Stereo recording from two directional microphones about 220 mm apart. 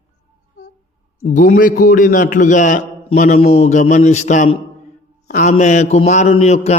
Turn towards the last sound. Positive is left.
turn(degrees=30)  # may be behind; listen again after turning